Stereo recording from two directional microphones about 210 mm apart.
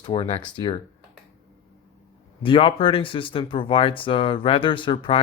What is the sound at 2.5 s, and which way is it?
Speech, 25° left (ahead or behind).